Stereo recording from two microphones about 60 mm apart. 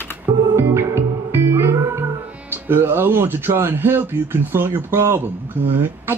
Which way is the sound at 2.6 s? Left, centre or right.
Right.